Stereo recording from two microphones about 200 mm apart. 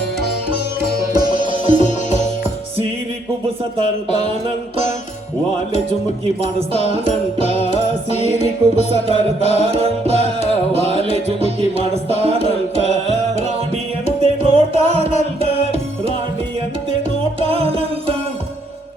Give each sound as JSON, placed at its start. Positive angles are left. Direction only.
{"t": 1.1, "sound": "music", "side_deg": -25}
{"t": 1.8, "sound": "music", "side_deg": 35}
{"t": 6.4, "sound": "music", "side_deg": -30}
{"t": 7.6, "sound": "music", "side_deg": 35}
{"t": 9.6, "sound": "music", "side_deg": -30}
{"t": 14.2, "sound": "music", "side_deg": -30}
{"t": 17.4, "sound": "music", "side_deg": -30}